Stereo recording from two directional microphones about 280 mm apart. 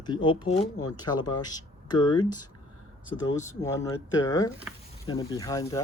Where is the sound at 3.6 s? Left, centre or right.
Centre.